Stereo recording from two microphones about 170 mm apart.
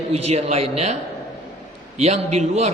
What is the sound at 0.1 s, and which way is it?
Speech, 40° right (ahead or behind).